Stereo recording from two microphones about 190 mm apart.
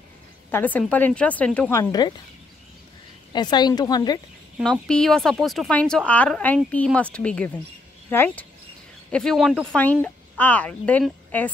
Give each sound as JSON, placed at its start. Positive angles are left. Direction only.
{"t": 0.5, "sound": "speech", "side_deg": 10}
{"t": 1.7, "sound": "a woman's voice", "side_deg": 20}
{"t": 3.3, "sound": "a woman's voice", "side_deg": 20}
{"t": 4.6, "sound": "speech", "side_deg": 5}